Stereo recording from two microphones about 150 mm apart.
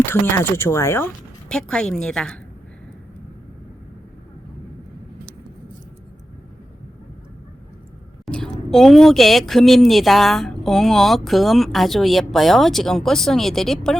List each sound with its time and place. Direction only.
0.0 s speech: 15° left (ahead or behind)
1.5 s speech: 5° left (ahead or behind)
8.2 s speech: 5° left (ahead or behind)